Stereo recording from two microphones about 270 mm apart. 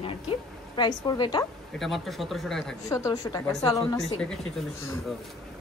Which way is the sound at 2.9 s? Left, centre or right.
Centre.